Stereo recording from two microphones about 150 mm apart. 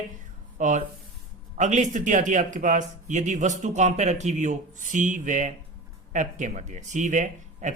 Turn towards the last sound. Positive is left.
turn(degrees=-55)  # may be behind; listen again after turning